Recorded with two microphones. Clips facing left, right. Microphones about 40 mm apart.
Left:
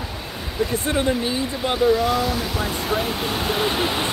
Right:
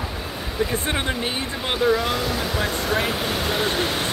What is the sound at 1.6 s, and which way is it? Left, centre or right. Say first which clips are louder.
Speech: left 2 dB; centre.